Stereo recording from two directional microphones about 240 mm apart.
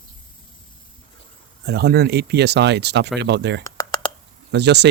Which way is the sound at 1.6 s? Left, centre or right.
Right.